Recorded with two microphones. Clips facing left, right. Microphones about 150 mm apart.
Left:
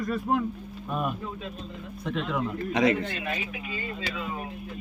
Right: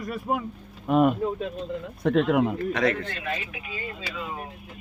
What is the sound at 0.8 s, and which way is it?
Speech, 75° right (ahead or behind).